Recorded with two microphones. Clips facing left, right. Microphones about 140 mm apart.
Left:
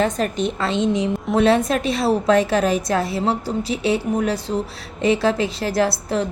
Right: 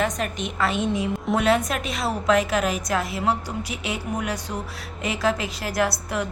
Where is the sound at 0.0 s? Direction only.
35° left (ahead or behind).